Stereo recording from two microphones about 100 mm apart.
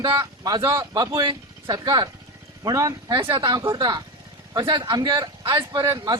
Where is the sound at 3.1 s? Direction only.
55° right (ahead or behind).